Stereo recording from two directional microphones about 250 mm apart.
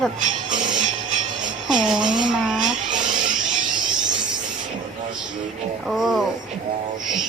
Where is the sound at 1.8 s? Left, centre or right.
Centre.